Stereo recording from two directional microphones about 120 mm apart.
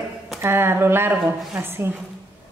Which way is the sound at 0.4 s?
20° right (ahead or behind).